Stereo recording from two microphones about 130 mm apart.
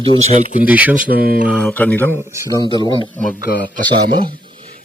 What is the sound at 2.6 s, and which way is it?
Speech, 40° right (ahead or behind).